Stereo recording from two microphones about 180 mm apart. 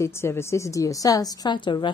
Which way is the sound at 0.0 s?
15° left (ahead or behind).